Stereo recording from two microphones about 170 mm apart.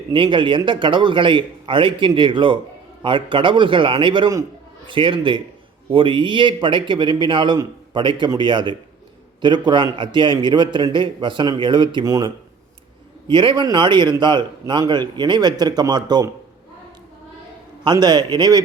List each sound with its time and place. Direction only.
0.1 s a man's voice: 30° right (ahead or behind)
17.8 s a man's voice: 25° right (ahead or behind)